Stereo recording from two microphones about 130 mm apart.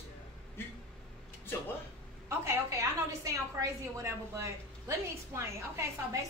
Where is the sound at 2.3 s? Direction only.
20° right (ahead or behind).